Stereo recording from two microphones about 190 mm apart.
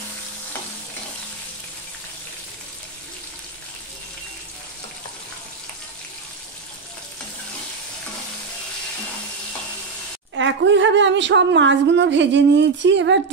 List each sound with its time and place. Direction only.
10.3 s speech: 75° right (ahead or behind)